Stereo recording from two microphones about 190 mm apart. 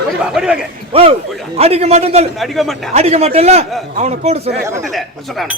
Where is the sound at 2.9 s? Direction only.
35° right (ahead or behind).